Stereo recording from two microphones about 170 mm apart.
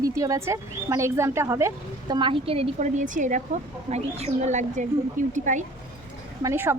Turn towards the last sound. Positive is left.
turn(degrees=-15)  # may be behind; listen again after turning